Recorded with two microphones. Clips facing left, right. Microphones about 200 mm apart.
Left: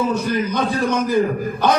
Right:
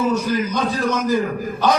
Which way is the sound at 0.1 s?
55° left (ahead or behind).